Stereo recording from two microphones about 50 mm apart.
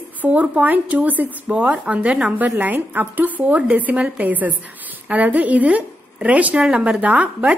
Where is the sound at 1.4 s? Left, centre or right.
Right.